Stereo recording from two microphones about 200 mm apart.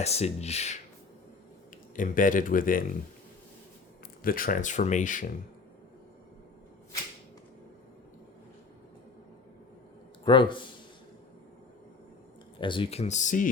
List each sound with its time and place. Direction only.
0.0 s speech: 30° left (ahead or behind)
2.0 s speech: 40° left (ahead or behind)
4.2 s speech: 45° left (ahead or behind)
10.2 s speech: 25° left (ahead or behind)
12.5 s speech: 25° left (ahead or behind); by 13.5 s 40° left (ahead or behind)